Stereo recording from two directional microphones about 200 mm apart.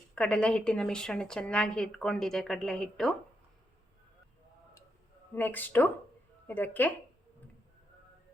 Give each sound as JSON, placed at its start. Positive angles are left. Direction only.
{"t": 0.1, "sound": "a woman's voice", "side_deg": 5}
{"t": 5.3, "sound": "speech", "side_deg": 10}